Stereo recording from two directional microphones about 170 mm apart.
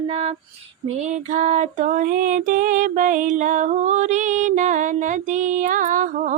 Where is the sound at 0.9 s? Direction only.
45° right (ahead or behind).